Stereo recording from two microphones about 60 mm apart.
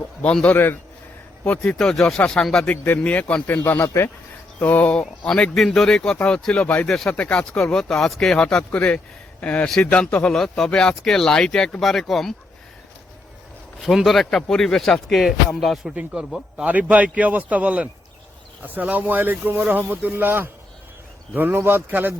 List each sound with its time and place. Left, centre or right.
0.4 s a man's voice: left
1.6 s speech: centre
2.6 s a man's voice: left
3.8 s speech: left
4.6 s a man's voice: left
4.9 s speech: centre
6.8 s speech: centre
7.5 s speech: centre
10.3 s speech: centre
13.8 s speech: centre
16.6 s a man's voice: right